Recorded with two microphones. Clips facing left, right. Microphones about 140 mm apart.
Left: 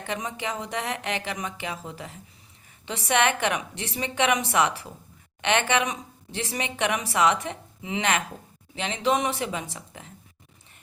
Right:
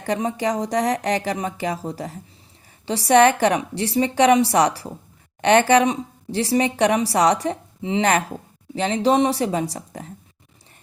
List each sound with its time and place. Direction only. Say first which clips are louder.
0.0 s speech: right 9 dB; 35° right (ahead or behind)